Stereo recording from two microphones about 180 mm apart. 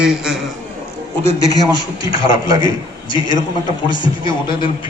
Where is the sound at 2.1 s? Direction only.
30° left (ahead or behind).